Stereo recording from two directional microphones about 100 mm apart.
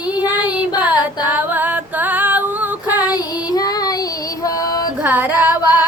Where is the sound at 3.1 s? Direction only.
40° left (ahead or behind).